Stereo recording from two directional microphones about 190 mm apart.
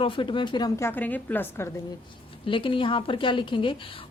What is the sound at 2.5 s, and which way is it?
A woman's voice, 25° left (ahead or behind).